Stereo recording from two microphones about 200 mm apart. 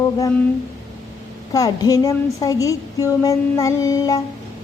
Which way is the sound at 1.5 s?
15° left (ahead or behind).